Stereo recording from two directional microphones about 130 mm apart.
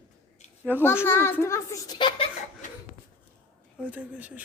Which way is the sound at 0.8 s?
20° left (ahead or behind).